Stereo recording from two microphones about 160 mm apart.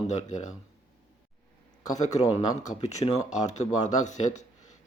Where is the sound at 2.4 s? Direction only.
25° left (ahead or behind).